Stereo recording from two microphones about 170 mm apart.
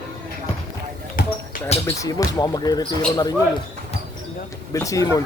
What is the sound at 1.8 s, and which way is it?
Speech, 20° left (ahead or behind).